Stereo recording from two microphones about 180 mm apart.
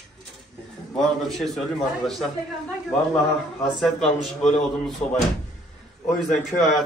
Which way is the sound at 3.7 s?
Centre (ahead or behind).